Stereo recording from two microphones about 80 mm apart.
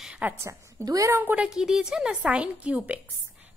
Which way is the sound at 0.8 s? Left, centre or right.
Right.